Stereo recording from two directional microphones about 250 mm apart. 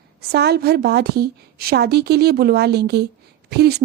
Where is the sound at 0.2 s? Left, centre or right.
Right.